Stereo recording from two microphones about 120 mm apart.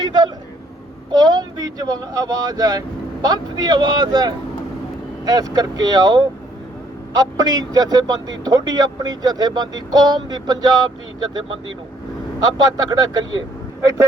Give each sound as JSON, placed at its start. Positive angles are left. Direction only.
{"t": 0.0, "sound": "a sound", "side_deg": -35}
{"t": 1.1, "sound": "a man's voice", "side_deg": -35}
{"t": 12.5, "sound": "a man's voice", "side_deg": -35}